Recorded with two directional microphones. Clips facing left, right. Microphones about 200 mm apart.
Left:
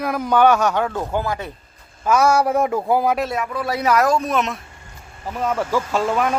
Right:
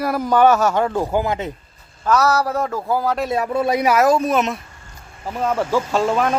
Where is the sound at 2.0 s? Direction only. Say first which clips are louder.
Left 1 dB; 10° left (ahead or behind).